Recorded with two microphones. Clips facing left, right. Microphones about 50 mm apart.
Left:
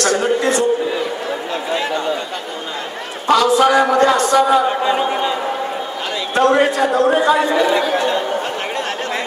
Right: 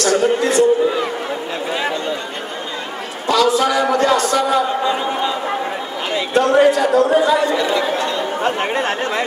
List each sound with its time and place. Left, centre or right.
0.2 s music: left
3.3 s a sound: left
3.8 s speech: left
4.8 s a man's voice: centre
6.3 s a man's voice: left
7.5 s a man's voice: left
8.5 s speech: right